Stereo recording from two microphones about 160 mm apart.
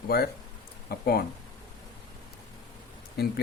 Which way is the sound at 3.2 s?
80° left.